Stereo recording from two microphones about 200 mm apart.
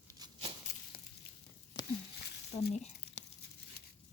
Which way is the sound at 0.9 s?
50° left (ahead or behind).